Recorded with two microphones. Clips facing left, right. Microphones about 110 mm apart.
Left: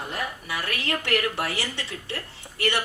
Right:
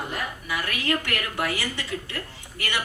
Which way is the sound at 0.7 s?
25° left (ahead or behind).